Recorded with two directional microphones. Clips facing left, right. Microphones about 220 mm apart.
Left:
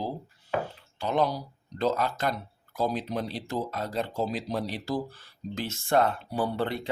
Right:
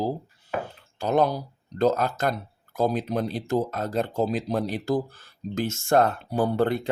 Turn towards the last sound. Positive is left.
turn(degrees=-45)  # may be behind; listen again after turning